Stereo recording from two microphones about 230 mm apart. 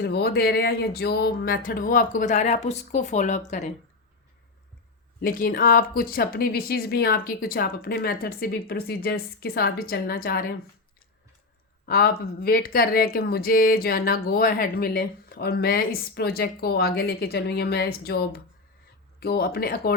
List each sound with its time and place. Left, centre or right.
0.0 s speech: left
5.2 s speech: left
11.9 s speech: left